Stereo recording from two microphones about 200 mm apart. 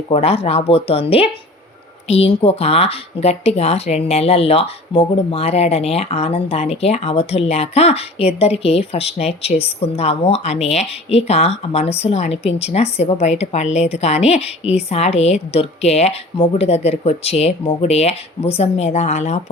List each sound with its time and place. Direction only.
0.1 s speech: 30° left (ahead or behind)